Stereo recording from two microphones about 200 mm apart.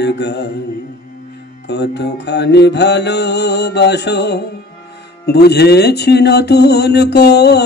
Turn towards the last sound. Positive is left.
turn(degrees=55)  # may be behind; listen again after turning